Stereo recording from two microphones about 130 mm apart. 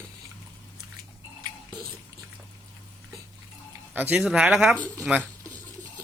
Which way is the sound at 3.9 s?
10° right (ahead or behind).